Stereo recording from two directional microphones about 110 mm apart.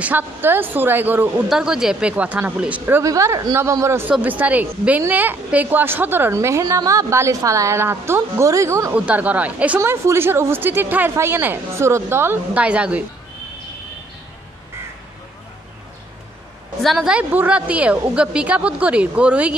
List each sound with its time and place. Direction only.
0.0 s a woman's voice: 20° right (ahead or behind)
1.5 s a woman's voice: 5° right (ahead or behind)
2.9 s a woman's voice: 30° right (ahead or behind)
4.1 s a woman's voice: 15° right (ahead or behind)
8.9 s a woman's voice: 10° right (ahead or behind)
9.8 s a woman's voice: 25° right (ahead or behind)
16.8 s a woman's voice: 5° right (ahead or behind)